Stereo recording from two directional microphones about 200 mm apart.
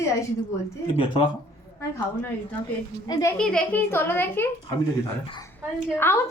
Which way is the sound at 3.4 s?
5° left (ahead or behind).